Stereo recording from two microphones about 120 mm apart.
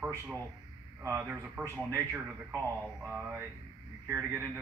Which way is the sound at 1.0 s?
25° right (ahead or behind).